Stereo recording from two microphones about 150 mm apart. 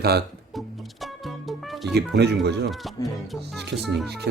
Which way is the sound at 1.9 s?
90° right.